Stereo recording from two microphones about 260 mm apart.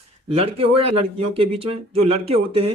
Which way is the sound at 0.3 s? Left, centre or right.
Right.